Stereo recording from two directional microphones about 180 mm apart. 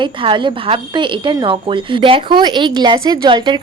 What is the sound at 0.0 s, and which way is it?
A woman's voice, 25° right (ahead or behind).